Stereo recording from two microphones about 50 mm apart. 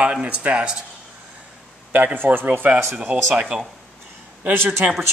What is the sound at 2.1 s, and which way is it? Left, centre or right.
Speech, right.